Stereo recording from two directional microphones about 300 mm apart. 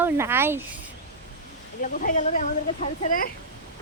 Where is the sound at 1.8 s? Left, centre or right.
Left.